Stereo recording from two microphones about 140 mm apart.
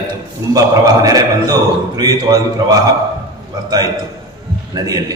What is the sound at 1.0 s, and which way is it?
A man's voice, 25° right (ahead or behind).